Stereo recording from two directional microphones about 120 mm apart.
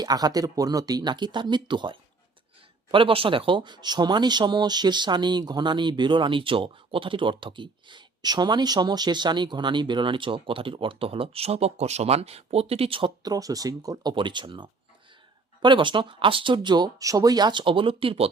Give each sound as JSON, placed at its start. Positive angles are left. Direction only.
{"t": 0.0, "sound": "speech", "side_deg": -30}
{"t": 13.2, "sound": "speech", "side_deg": -30}